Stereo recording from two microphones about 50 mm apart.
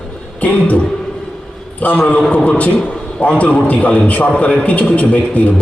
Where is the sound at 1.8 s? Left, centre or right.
Left.